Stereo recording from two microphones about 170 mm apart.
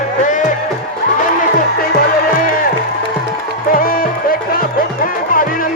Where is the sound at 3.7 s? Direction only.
60° left (ahead or behind).